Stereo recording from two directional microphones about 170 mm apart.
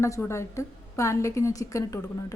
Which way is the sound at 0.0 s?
15° left (ahead or behind).